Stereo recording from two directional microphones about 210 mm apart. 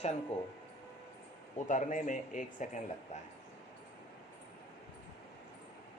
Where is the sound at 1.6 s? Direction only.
35° left (ahead or behind).